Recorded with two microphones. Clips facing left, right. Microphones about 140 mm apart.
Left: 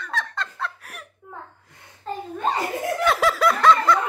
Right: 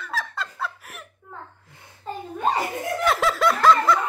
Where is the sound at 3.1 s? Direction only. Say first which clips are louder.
Left 1 dB; centre (ahead or behind).